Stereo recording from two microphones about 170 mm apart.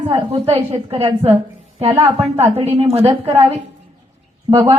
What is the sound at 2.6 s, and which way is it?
Speech, 35° right (ahead or behind).